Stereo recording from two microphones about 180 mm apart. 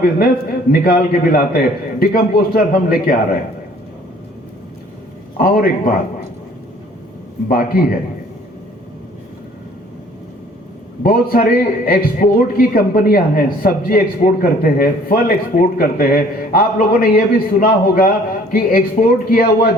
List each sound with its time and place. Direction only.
0.0 s a man's voice: 50° left (ahead or behind)
5.4 s speech: 55° left (ahead or behind)
7.4 s speech: 55° left (ahead or behind)
11.0 s a man's voice: 55° left (ahead or behind)